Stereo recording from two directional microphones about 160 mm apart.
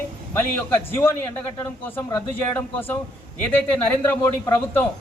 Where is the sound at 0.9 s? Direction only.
15° left (ahead or behind).